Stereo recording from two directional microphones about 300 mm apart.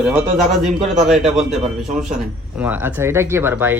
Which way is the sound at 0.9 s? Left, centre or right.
Centre.